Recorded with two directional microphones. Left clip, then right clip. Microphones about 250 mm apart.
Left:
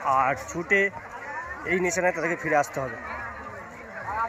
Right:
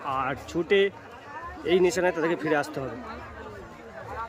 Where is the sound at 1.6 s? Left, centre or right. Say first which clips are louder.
Right 2 dB; centre.